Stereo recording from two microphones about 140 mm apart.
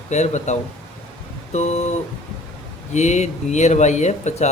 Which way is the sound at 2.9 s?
55° left (ahead or behind).